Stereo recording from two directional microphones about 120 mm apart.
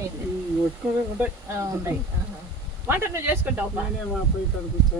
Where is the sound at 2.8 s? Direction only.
20° right (ahead or behind).